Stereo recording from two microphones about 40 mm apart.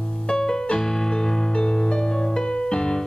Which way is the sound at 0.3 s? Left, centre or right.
Centre.